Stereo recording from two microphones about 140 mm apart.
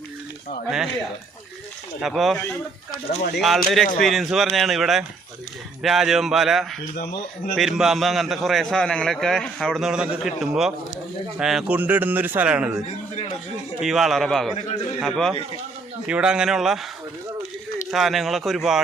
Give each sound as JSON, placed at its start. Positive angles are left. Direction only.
{"t": 2.0, "sound": "a man's voice", "side_deg": 0}
{"t": 3.4, "sound": "a man's voice", "side_deg": 0}
{"t": 6.9, "sound": "speech", "side_deg": 90}
{"t": 7.5, "sound": "a man's voice", "side_deg": 0}
{"t": 13.8, "sound": "a man's voice", "side_deg": 0}
{"t": 14.5, "sound": "a man's voice", "side_deg": 50}
{"t": 15.0, "sound": "a man's voice", "side_deg": 0}
{"t": 17.9, "sound": "a man's voice", "side_deg": 0}